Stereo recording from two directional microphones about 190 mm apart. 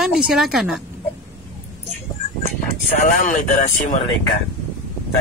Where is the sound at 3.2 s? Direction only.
40° left (ahead or behind).